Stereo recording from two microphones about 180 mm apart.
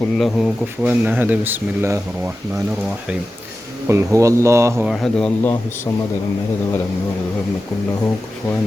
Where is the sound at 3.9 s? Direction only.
15° right (ahead or behind).